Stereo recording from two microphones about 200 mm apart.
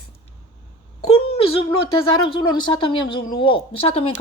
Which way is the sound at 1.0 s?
30° left (ahead or behind).